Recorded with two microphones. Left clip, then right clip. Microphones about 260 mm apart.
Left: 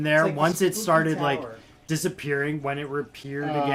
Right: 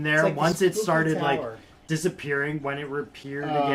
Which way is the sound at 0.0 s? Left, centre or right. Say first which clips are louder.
Left 1 dB; left.